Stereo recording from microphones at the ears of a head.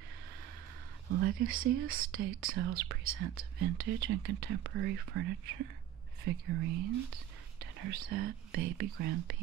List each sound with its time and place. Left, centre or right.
1.0 s speech: right